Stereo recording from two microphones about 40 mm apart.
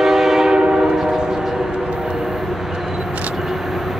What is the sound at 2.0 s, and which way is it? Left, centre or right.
Vehicle, centre.